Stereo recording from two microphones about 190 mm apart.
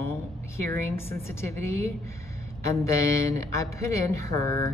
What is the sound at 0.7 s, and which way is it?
Speech, 15° left (ahead or behind).